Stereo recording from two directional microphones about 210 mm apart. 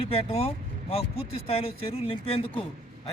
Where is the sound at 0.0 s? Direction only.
30° left (ahead or behind).